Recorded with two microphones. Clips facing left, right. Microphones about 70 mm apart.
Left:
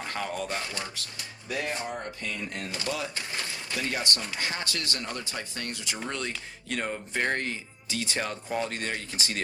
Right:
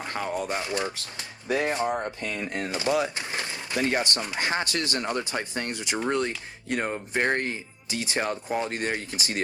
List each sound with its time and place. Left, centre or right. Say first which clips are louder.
0.1 s speech: right 4 dB; right
1.5 s speech: right 7 dB; right
2.6 s speech: right 9 dB; right
4.0 s speech: right 3 dB; right